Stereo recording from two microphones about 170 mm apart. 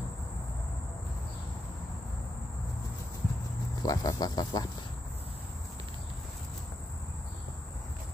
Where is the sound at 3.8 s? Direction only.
20° left (ahead or behind).